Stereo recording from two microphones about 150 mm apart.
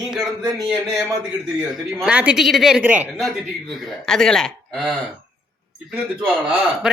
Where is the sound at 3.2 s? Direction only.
Centre (ahead or behind).